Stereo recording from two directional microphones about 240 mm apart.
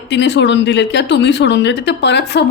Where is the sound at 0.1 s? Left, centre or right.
Left.